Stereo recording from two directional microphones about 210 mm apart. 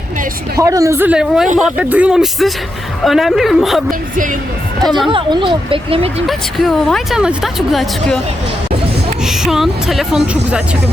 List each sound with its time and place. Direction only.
0.6 s speech: 15° right (ahead or behind)
5.0 s speech: 25° right (ahead or behind)
6.2 s speech: centre (ahead or behind)
9.2 s speech: centre (ahead or behind)